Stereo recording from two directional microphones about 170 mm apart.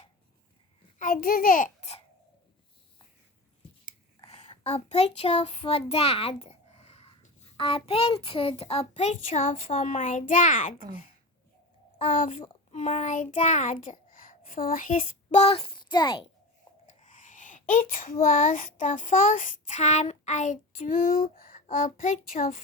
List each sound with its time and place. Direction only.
0.9 s a child's voice: 55° left (ahead or behind)
4.3 s child singing: 40° left (ahead or behind)
9.9 s a child's voice: 50° left (ahead or behind)
11.9 s a child's voice: 50° left (ahead or behind); by 16.2 s 25° left (ahead or behind)
16.8 s a child's voice: 50° left (ahead or behind)